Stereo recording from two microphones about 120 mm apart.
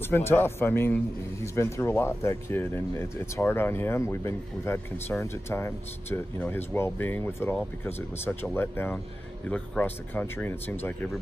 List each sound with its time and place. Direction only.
0.1 s a man's voice: 20° left (ahead or behind)